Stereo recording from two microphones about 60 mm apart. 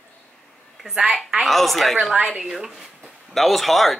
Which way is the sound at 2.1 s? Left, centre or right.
Centre.